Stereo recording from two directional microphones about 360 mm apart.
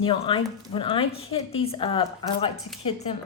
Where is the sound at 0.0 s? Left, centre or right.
Centre.